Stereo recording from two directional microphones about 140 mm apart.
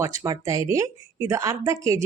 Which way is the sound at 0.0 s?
20° right (ahead or behind).